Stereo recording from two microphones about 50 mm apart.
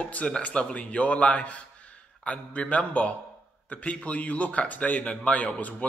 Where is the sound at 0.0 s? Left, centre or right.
Left.